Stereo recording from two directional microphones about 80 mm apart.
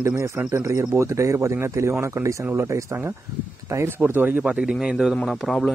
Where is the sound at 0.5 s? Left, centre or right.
Right.